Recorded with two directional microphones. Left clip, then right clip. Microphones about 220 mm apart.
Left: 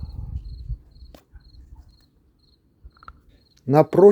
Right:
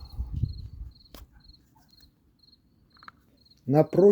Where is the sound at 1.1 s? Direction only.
5° right (ahead or behind).